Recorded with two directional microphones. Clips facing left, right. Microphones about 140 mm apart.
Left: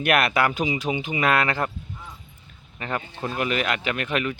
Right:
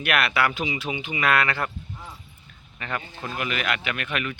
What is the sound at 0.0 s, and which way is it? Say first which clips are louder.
Speech: left 3 dB; 45° left (ahead or behind).